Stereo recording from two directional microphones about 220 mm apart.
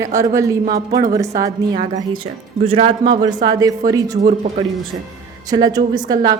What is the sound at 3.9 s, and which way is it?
Speech, 15° right (ahead or behind).